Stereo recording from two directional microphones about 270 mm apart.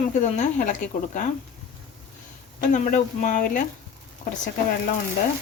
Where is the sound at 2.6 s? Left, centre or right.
Left.